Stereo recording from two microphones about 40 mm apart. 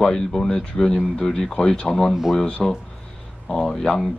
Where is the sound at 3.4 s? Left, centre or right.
Centre.